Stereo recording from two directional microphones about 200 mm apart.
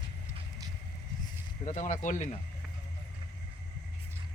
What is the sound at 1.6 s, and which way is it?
Speech, 40° left (ahead or behind).